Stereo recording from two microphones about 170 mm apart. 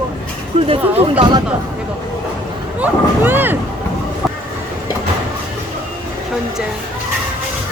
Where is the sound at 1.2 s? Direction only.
25° right (ahead or behind).